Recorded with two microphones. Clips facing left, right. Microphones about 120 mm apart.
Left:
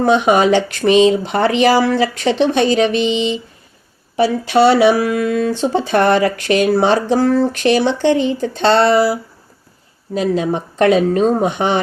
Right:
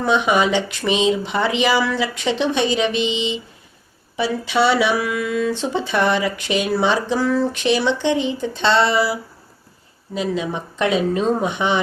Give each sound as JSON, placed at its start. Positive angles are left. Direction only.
{"t": 0.0, "sound": "speech", "side_deg": 45}
{"t": 4.2, "sound": "speech", "side_deg": 50}
{"t": 5.8, "sound": "speech", "side_deg": 55}
{"t": 10.2, "sound": "speech", "side_deg": 50}